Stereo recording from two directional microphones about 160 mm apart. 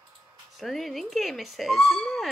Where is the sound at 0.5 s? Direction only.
Centre (ahead or behind).